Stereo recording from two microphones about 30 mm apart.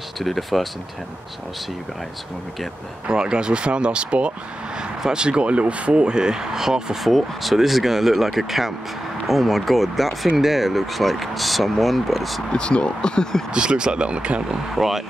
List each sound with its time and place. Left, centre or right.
0.2 s speech: centre
3.1 s speech: right
6.0 s speech: right
7.0 s speech: centre
12.5 s speech: left
13.5 s speech: right
14.5 s speech: centre